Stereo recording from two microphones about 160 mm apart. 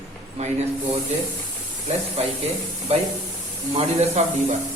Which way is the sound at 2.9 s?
40° right (ahead or behind).